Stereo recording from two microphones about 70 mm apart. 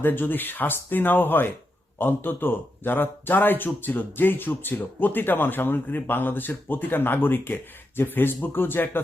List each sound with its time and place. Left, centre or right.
0.0 s speech: left